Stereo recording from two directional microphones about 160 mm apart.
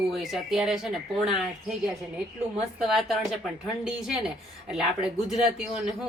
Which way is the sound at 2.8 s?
Centre (ahead or behind).